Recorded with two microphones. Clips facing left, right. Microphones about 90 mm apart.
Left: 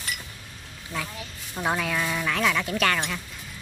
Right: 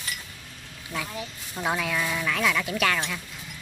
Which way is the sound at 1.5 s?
Centre (ahead or behind).